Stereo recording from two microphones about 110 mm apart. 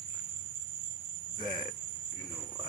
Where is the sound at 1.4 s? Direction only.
45° right (ahead or behind).